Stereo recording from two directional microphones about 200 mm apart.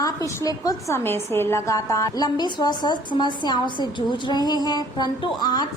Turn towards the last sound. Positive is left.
turn(degrees=20)  # may be behind; listen again after turning